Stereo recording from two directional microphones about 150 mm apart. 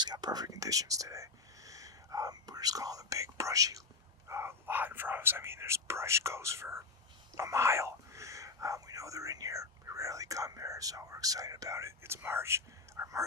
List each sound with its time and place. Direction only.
0.0 s speech: 30° right (ahead or behind)